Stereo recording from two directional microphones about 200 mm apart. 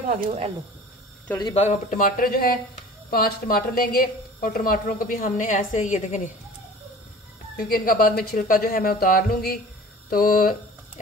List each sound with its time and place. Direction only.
1.4 s a man's voice: 30° left (ahead or behind)
7.5 s a woman's voice: 45° left (ahead or behind)